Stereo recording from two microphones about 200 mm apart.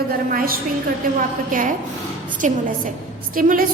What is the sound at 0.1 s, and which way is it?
A woman's voice, 45° right (ahead or behind).